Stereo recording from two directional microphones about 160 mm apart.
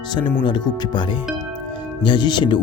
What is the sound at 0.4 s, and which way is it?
Speech, 30° left (ahead or behind).